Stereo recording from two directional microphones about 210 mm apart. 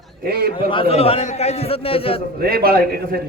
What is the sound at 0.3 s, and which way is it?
Speech, 50° right (ahead or behind).